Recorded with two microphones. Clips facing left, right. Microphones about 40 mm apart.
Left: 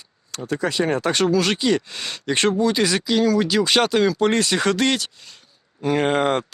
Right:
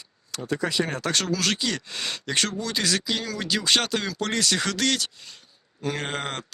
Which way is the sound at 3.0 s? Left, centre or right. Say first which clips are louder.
Left 10 dB; centre.